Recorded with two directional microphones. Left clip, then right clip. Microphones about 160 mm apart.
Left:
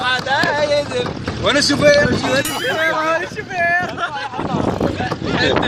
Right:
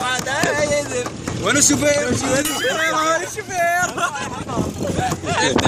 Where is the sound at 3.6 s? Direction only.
55° right (ahead or behind).